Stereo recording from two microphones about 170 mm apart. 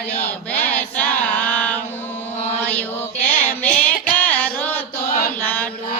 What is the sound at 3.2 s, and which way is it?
Child singing, 10° left (ahead or behind).